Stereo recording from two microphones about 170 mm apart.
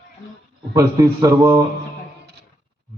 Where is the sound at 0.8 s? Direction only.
20° right (ahead or behind).